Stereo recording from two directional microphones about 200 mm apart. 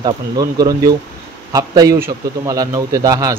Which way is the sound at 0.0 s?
20° right (ahead or behind).